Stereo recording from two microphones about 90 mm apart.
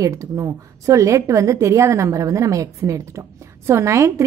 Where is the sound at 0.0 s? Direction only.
35° right (ahead or behind).